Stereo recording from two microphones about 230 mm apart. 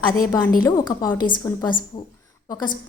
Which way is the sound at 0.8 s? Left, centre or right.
Centre.